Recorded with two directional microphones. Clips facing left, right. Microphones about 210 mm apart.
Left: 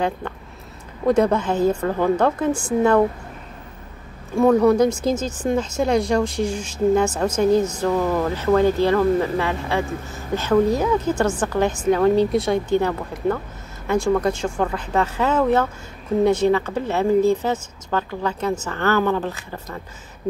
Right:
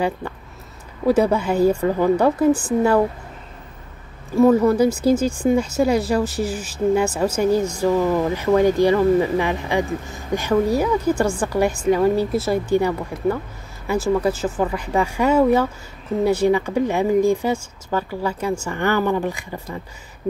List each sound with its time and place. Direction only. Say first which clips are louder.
1.0 s speech: even; 10° right (ahead or behind)
4.4 s speech: right 1 dB; 5° right (ahead or behind)